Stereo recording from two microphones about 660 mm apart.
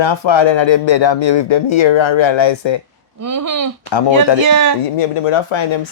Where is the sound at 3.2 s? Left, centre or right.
Right.